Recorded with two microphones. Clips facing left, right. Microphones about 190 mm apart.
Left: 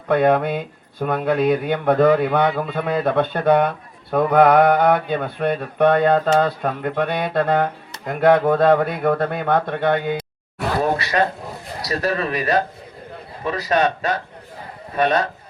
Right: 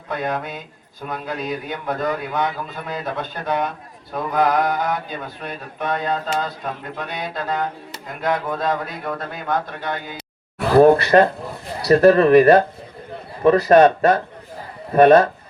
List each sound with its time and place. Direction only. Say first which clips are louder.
0.1 s speech: left 9 dB; 60° left (ahead or behind)
10.8 s speech: right 9 dB; 50° right (ahead or behind)